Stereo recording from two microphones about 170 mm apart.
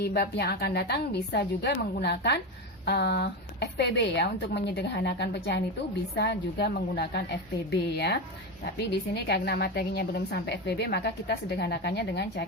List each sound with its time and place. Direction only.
0.0 s a woman's voice: 70° left (ahead or behind); by 5.6 s 85° left
6.1 s a woman's voice: 75° left (ahead or behind)